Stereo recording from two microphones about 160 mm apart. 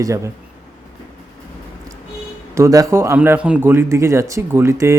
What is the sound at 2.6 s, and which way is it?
Speech, 20° right (ahead or behind).